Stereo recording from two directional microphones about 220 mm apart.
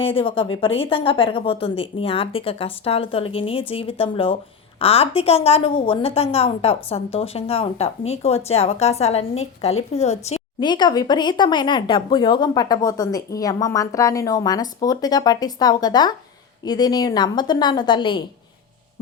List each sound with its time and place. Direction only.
0.0 s a woman's voice: 25° left (ahead or behind)